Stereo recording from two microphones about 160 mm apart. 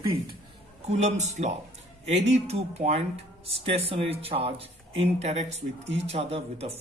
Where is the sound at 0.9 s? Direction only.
45° right (ahead or behind).